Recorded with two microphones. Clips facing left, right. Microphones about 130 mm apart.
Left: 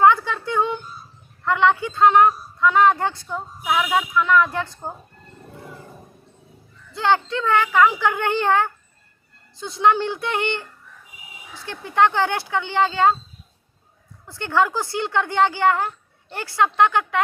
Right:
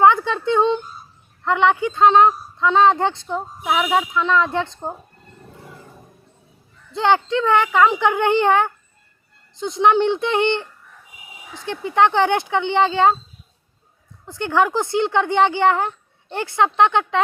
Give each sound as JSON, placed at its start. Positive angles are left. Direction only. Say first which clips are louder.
{"t": 0.0, "sound": "a sound", "louder": "right 2 dB", "side_deg": -20}
{"t": 1.5, "sound": "speech", "louder": "right 1 dB", "side_deg": -20}
{"t": 6.9, "sound": "speech", "louder": "right 3 dB", "side_deg": -20}
{"t": 14.3, "sound": "speech", "louder": "right 2 dB", "side_deg": -15}